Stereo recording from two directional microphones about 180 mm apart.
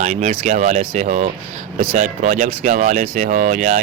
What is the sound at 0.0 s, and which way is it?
Speech, 40° right (ahead or behind).